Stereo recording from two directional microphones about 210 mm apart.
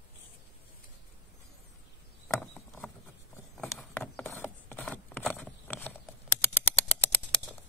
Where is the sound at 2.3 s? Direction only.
10° left (ahead or behind).